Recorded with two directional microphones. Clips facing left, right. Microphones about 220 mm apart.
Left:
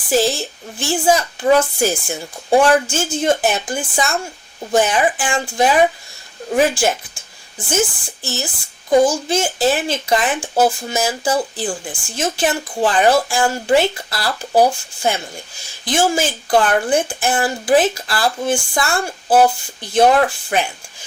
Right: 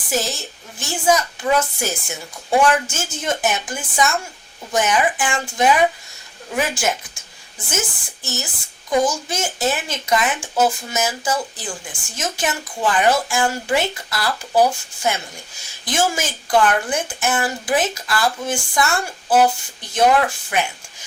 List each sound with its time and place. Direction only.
0.1 s speech: 30° left (ahead or behind)